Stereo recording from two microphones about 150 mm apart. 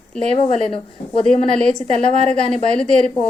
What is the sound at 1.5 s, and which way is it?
A woman's voice, 5° left (ahead or behind).